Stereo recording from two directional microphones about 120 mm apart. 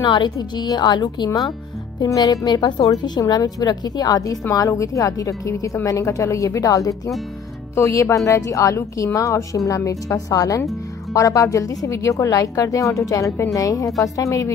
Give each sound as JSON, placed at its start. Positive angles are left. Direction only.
{"t": 0.0, "sound": "a woman's voice", "side_deg": 40}